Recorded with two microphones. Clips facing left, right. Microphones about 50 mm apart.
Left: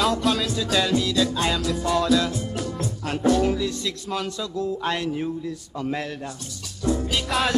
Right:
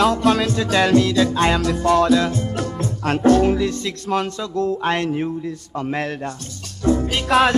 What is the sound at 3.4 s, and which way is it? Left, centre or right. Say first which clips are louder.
Music: right 5 dB; right.